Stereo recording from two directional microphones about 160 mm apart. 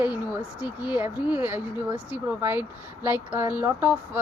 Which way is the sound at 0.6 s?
10° right (ahead or behind).